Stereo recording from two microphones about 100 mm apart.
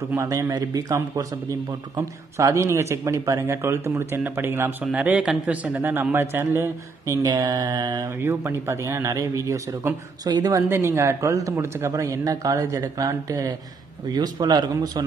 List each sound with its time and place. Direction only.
0.1 s a man's voice: 30° right (ahead or behind)
8.2 s a man's voice: 25° right (ahead or behind); by 10.6 s 40° right (ahead or behind)
10.7 s speech: 25° right (ahead or behind); by 15.0 s 45° right (ahead or behind)